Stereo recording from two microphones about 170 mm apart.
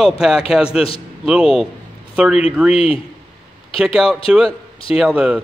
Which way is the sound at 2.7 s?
35° left (ahead or behind).